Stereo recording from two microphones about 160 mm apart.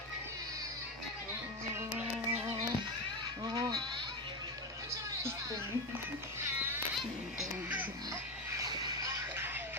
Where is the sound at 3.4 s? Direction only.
25° right (ahead or behind).